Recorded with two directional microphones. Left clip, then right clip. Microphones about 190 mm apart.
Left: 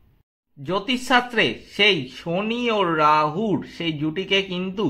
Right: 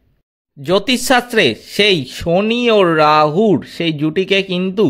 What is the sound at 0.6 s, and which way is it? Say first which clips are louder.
Speech: right 9 dB; 60° right (ahead or behind).